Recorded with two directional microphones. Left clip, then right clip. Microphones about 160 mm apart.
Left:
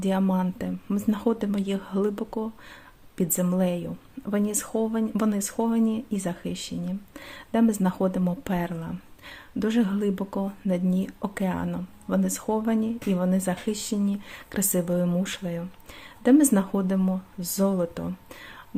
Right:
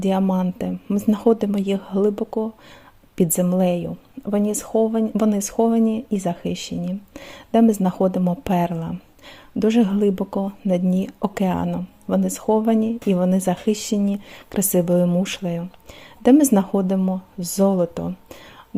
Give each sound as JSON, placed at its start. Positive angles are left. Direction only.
{"t": 0.0, "sound": "a woman's voice", "side_deg": -30}